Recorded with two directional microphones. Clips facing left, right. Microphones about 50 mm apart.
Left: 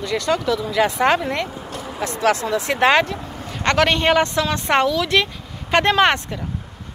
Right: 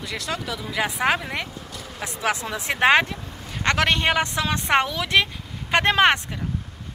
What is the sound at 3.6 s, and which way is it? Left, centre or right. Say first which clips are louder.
A woman's voice: left 3 dB; centre.